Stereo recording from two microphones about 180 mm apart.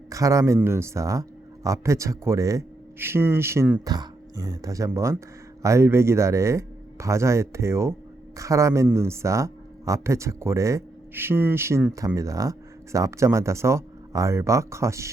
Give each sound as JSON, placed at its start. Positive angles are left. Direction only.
{"t": 0.1, "sound": "speech", "side_deg": -15}